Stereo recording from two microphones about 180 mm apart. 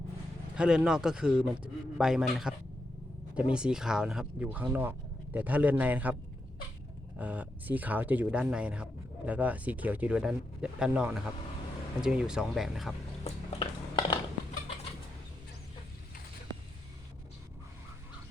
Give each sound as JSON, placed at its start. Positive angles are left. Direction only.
{"t": 0.5, "sound": "a man's voice", "side_deg": -5}
{"t": 7.2, "sound": "a man's voice", "side_deg": -10}
{"t": 13.2, "sound": "a sound", "side_deg": 25}